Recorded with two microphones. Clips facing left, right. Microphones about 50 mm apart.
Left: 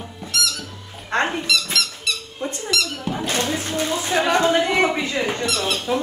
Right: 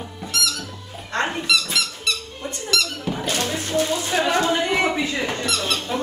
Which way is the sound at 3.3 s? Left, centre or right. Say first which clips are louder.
Left 2 dB; left.